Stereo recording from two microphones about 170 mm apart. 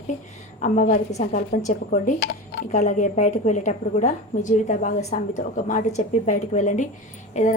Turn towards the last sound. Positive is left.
turn(degrees=45)  # may be behind; listen again after turning